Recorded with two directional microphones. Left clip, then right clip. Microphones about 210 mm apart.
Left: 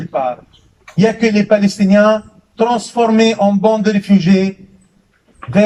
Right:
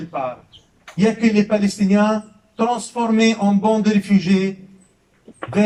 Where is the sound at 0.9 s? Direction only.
45° left (ahead or behind).